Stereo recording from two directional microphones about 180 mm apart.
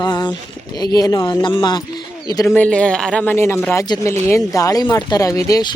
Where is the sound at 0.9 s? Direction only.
20° left (ahead or behind).